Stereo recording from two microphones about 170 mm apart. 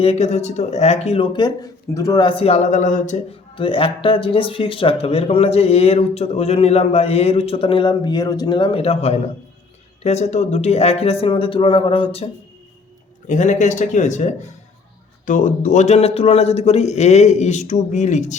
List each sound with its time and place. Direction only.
0.0 s speech: 40° left (ahead or behind)
3.5 s speech: 30° left (ahead or behind)
13.2 s speech: 45° left (ahead or behind)